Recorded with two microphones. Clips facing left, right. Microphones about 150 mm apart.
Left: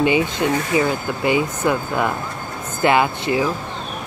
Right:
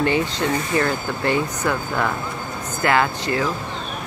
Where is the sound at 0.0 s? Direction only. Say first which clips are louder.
Left 3 dB; 15° left (ahead or behind).